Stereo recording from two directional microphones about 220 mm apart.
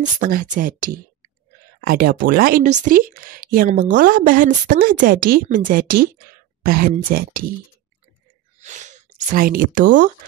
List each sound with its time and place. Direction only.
0.0 s speech: 40° right (ahead or behind)
8.5 s gasp: 35° right (ahead or behind)